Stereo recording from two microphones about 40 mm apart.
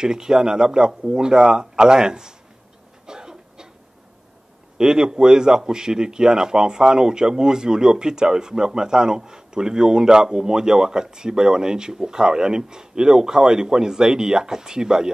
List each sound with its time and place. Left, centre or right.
0.0 s a man's voice: centre
3.1 s cough: centre
4.7 s a man's voice: centre